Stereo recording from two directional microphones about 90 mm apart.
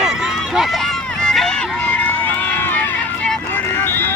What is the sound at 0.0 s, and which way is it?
Run, 5° right (ahead or behind).